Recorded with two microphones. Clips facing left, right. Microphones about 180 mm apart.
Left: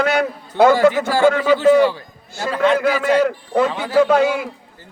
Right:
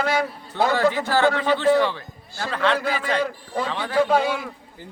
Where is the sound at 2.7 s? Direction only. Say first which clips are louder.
Left 8 dB; 80° left.